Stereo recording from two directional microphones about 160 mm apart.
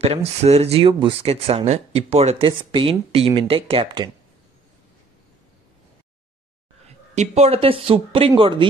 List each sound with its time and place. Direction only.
0.0 s speech: 40° right (ahead or behind)
7.2 s speech: 40° right (ahead or behind)